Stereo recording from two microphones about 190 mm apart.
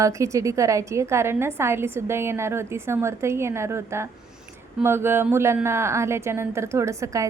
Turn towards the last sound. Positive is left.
turn(degrees=-15)  # may be behind; listen again after turning